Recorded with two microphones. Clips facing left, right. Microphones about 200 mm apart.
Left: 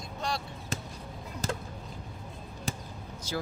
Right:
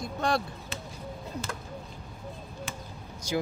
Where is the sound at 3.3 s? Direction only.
15° right (ahead or behind).